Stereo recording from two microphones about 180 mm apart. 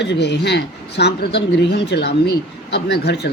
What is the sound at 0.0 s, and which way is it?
Speech, 70° left (ahead or behind).